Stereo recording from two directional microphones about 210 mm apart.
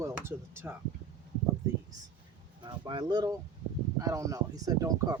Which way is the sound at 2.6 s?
20° right (ahead or behind).